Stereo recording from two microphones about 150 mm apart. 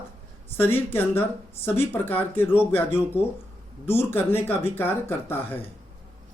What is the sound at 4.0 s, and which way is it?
Speech, 15° left (ahead or behind).